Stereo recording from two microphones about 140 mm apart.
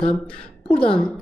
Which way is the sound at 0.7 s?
40° left (ahead or behind).